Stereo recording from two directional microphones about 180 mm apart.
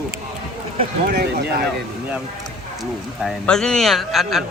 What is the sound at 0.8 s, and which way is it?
Speech, 55° right (ahead or behind).